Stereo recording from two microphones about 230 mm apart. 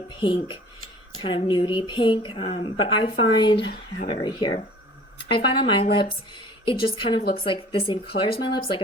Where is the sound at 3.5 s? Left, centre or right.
Left.